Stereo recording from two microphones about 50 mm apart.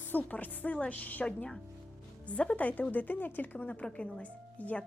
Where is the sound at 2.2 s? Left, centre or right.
Left.